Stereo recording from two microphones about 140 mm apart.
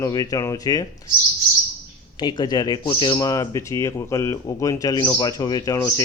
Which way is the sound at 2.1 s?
35° left (ahead or behind).